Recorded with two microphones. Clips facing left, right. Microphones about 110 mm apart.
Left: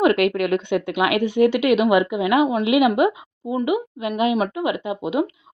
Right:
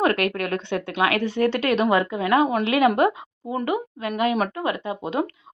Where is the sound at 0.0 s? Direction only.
20° left (ahead or behind).